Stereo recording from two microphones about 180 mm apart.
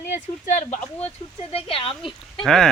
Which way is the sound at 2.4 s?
Centre (ahead or behind).